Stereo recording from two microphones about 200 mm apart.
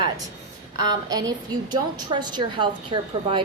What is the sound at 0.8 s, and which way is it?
A woman's voice, 20° right (ahead or behind).